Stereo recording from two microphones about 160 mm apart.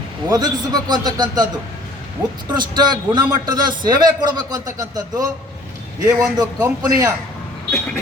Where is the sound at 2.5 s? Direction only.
25° right (ahead or behind).